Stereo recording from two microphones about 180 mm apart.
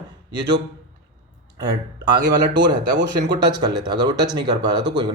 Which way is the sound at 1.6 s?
20° right (ahead or behind).